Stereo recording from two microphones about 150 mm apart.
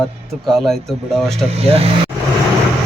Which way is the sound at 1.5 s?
40° right (ahead or behind).